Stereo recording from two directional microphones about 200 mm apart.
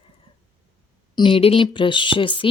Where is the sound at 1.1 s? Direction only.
25° left (ahead or behind).